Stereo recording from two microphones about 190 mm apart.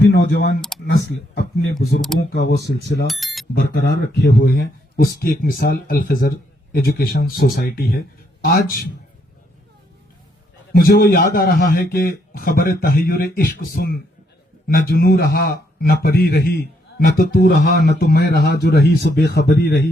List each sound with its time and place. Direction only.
0.0 s speech: 60° left (ahead or behind)
0.7 s computer keyboard: 5° left (ahead or behind)
1.1 s speech: 60° left (ahead or behind)
2.6 s speech: 60° right (ahead or behind)
2.8 s speech: 60° left (ahead or behind)
3.1 s a sound: centre (ahead or behind)
3.5 s speech: 55° left (ahead or behind)
10.8 s speech: 55° left (ahead or behind)